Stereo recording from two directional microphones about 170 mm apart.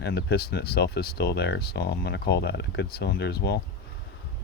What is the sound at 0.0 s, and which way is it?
Speech, 75° left (ahead or behind).